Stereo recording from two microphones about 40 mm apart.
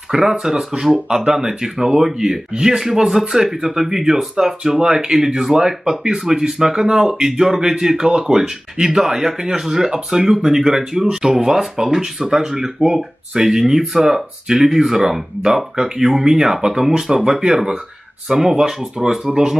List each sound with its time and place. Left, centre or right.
0.1 s speech: centre
0.9 s speech: centre